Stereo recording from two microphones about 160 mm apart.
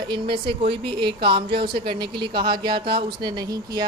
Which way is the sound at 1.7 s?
75° right (ahead or behind).